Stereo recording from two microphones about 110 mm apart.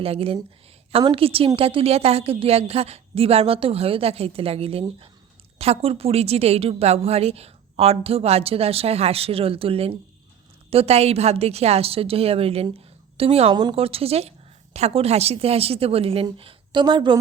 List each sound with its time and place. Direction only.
0.0 s a woman's voice: 60° right (ahead or behind)
13.5 s a woman's voice: 40° right (ahead or behind)
13.7 s a woman's voice: 60° right (ahead or behind)
16.4 s a sound: 55° right (ahead or behind)
16.8 s a woman's voice: 45° right (ahead or behind)